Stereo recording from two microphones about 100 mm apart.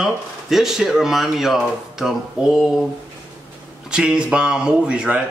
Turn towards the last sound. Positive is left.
turn(degrees=-10)  # may be behind; listen again after turning